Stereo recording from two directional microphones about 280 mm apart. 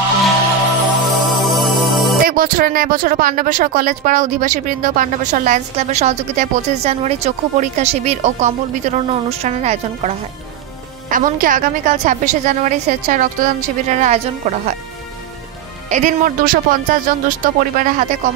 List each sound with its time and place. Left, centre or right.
1.0 s music: centre
2.2 s speech: right
15.9 s speech: right